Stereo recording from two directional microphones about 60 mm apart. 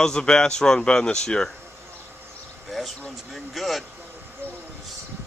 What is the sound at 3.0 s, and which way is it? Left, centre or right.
Speech, centre.